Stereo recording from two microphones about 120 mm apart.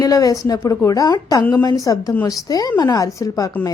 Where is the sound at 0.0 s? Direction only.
30° left (ahead or behind).